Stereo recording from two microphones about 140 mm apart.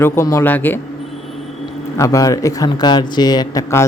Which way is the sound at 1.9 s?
25° left (ahead or behind).